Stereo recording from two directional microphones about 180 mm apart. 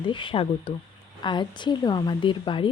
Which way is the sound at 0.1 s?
25° left (ahead or behind).